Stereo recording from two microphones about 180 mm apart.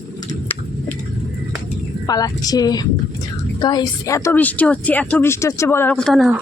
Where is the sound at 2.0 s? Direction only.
20° left (ahead or behind).